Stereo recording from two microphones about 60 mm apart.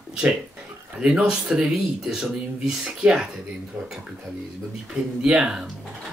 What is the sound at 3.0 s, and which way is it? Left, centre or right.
Speech, centre.